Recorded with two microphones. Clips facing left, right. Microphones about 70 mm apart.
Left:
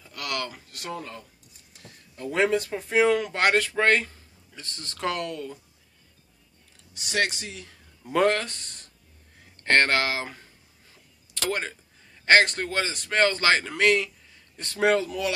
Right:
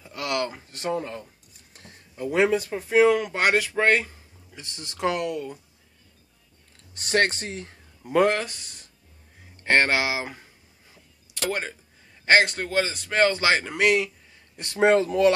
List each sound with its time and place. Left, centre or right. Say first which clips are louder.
0.0 s a sound: right 5 dB; right
2.1 s speech: right 2 dB; centre
6.9 s speech: right 4 dB; right
8.0 s speech: right 1 dB; centre
12.3 s speech: even; centre; by 15.0 s right
15.0 s speech: right 8 dB; right